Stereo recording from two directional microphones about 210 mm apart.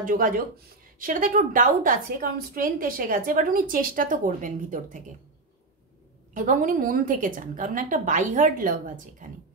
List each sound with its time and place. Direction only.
0.0 s a woman's voice: 40° right (ahead or behind)
6.3 s a woman's voice: 40° right (ahead or behind)